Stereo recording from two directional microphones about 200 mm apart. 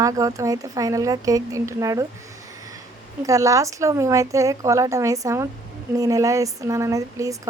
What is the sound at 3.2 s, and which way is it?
A woman's voice, 15° right (ahead or behind).